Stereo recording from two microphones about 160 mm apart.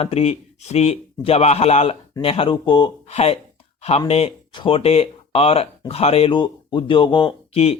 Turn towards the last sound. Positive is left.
turn(degrees=40)  # may be behind; listen again after turning